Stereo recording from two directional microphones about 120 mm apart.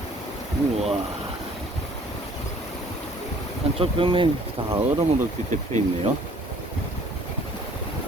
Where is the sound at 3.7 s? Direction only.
45° right (ahead or behind).